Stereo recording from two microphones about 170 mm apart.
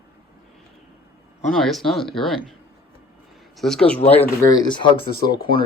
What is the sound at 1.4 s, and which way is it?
Speech, centre (ahead or behind).